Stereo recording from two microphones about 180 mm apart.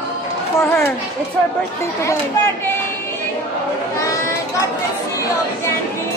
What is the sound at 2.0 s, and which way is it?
Speech, 15° left (ahead or behind).